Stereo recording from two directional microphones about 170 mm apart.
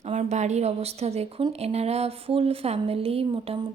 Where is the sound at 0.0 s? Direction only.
40° right (ahead or behind).